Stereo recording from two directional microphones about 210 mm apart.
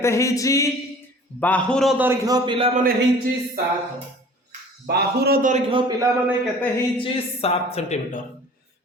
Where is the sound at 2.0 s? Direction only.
15° right (ahead or behind).